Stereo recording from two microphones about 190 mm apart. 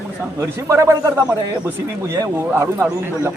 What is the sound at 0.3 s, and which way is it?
A man's voice, 15° right (ahead or behind).